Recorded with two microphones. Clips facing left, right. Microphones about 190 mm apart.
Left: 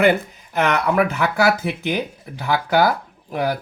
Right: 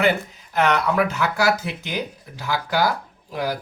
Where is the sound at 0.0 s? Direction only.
55° left (ahead or behind).